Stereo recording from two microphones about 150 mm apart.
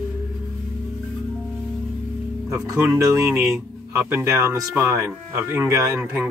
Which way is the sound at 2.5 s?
10° right (ahead or behind).